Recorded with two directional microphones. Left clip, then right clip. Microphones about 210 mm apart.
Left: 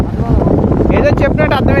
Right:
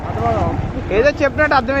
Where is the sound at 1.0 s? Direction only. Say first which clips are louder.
Right 2 dB; 60° left (ahead or behind).